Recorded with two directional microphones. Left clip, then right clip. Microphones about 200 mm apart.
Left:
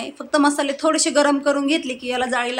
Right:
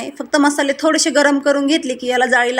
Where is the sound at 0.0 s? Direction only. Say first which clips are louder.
Right 3 dB; 20° right (ahead or behind).